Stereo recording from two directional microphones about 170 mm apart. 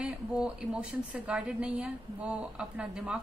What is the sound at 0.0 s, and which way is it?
A woman's voice, 5° right (ahead or behind).